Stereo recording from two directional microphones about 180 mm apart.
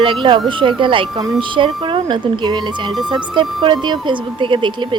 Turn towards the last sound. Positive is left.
turn(degrees=-25)  # may be behind; listen again after turning